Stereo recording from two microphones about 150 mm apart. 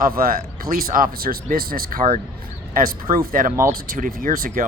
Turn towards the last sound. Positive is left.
turn(degrees=-70)  # may be behind; listen again after turning